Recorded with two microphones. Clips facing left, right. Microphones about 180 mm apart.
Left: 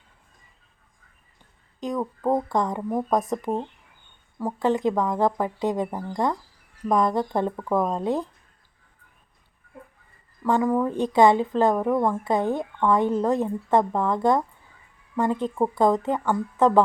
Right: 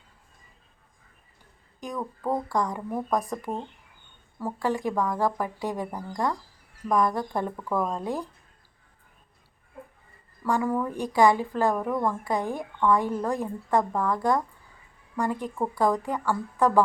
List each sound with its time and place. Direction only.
1.8 s speech: 20° left (ahead or behind)
10.4 s speech: 20° left (ahead or behind)